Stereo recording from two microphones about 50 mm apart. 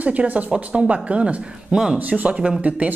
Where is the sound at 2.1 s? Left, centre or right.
Right.